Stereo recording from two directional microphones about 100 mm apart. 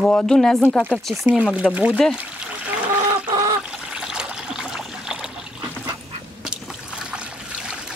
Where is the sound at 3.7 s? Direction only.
10° right (ahead or behind).